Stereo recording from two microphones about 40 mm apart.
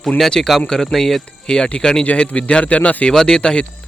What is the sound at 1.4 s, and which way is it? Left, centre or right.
Speech, left.